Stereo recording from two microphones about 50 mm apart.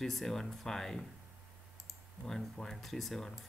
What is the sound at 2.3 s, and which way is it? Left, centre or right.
Speech, centre.